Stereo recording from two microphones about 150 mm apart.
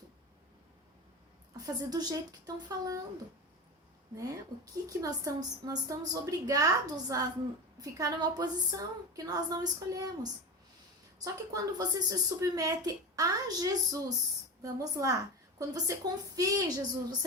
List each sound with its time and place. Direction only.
1.5 s a woman's voice: 25° right (ahead or behind)
4.1 s a woman's voice: 25° right (ahead or behind)
11.2 s a woman's voice: 25° right (ahead or behind)